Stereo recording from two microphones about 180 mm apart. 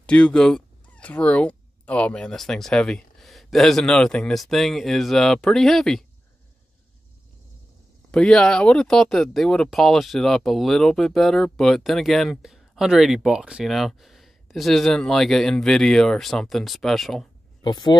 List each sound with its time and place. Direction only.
0.0 s speech: 5° left (ahead or behind)
8.1 s speech: 5° left (ahead or behind)
17.6 s speech: 25° left (ahead or behind)